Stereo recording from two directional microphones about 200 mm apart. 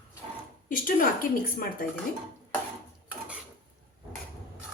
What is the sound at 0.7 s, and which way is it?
Speech, 45° left (ahead or behind).